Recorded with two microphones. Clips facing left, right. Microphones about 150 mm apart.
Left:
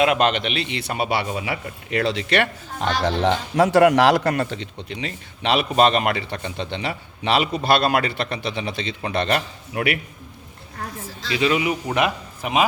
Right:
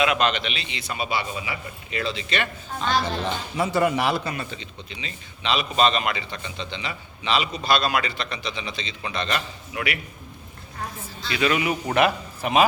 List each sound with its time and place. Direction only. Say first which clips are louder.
0.0 s a man's voice: left 4 dB; 50° left (ahead or behind)
11.3 s a man's voice: left 2 dB; 25° left (ahead or behind)